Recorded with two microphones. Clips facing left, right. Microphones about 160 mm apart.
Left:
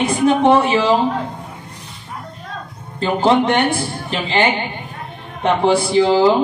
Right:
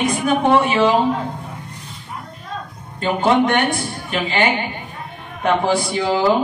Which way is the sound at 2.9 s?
30° left (ahead or behind).